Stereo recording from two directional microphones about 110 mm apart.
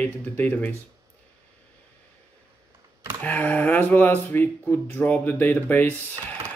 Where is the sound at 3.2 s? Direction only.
15° left (ahead or behind).